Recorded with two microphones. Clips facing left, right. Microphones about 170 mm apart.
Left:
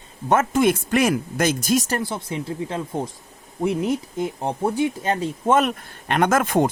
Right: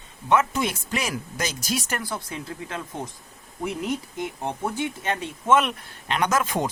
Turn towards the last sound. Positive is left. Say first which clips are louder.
# left 5 dB
turn(degrees=50)  # may be behind; listen again after turning